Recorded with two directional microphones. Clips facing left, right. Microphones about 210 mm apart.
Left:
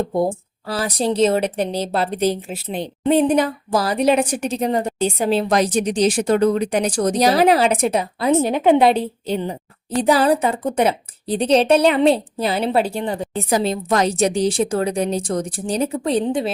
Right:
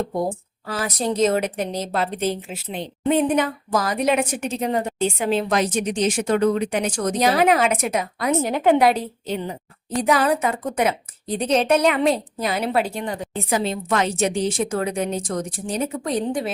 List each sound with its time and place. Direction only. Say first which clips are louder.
0.7 s a woman's voice: left 3 dB; 30° left (ahead or behind)